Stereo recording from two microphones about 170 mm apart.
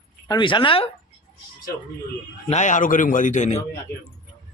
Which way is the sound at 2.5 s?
45° left (ahead or behind).